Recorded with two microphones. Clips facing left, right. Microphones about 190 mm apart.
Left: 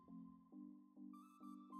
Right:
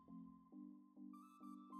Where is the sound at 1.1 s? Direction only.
Centre (ahead or behind).